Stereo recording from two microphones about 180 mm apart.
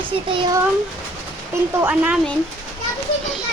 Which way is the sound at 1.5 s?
10° right (ahead or behind).